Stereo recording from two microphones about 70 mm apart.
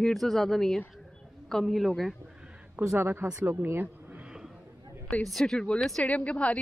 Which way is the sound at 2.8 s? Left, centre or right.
Right.